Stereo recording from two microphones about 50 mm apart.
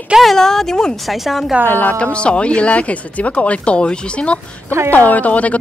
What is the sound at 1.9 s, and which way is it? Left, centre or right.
Speech, left.